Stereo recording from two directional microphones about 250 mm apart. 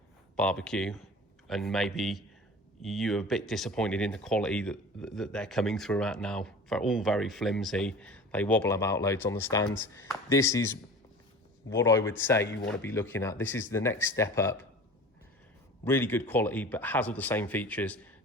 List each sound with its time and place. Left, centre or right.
0.3 s speech: centre
11.7 s speech: centre
15.8 s speech: centre